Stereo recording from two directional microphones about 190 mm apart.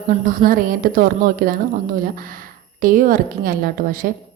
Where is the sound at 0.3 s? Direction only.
45° right (ahead or behind).